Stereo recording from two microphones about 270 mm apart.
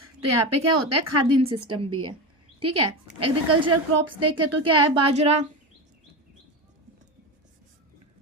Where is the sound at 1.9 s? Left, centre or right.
Right.